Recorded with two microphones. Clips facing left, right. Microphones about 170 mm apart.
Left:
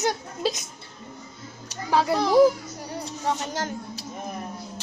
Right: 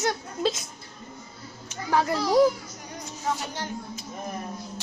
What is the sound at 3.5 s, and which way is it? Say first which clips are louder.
Speech: left 3 dB; 40° left (ahead or behind).